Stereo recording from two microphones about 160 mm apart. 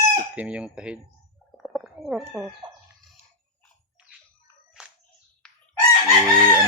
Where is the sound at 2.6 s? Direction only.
30° right (ahead or behind).